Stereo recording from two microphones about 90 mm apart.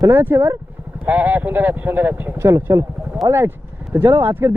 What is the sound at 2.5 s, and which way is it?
Speech, 35° right (ahead or behind).